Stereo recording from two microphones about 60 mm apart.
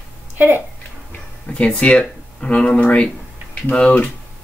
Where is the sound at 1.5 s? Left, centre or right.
Left.